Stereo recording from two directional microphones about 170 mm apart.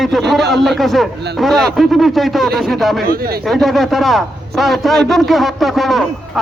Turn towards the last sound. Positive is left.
turn(degrees=0)  # may be behind; listen again after turning